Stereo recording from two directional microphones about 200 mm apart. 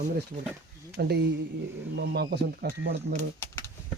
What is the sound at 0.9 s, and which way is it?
Speech, 55° right (ahead or behind).